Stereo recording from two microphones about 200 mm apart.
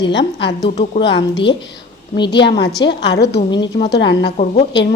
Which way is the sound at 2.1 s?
20° left (ahead or behind).